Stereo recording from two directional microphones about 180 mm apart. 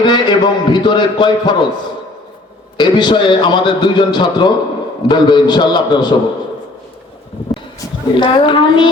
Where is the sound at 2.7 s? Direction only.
25° left (ahead or behind).